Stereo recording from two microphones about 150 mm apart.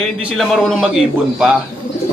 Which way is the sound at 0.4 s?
Centre (ahead or behind).